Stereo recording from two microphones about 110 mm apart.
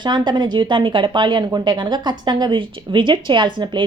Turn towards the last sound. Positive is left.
turn(degrees=-45)  # may be behind; listen again after turning